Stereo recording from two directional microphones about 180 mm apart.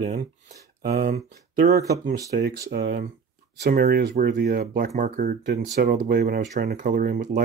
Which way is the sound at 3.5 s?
60° right (ahead or behind).